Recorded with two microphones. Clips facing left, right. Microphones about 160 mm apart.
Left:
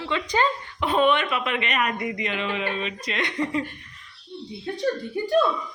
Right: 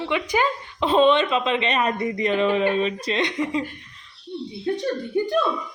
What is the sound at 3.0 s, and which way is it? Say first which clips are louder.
Speech: right 3 dB; 25° right (ahead or behind).